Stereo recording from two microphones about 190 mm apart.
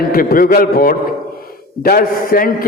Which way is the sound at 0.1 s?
50° left (ahead or behind).